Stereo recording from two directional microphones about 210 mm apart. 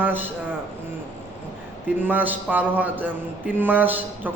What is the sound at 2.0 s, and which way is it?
A man's voice, 10° right (ahead or behind).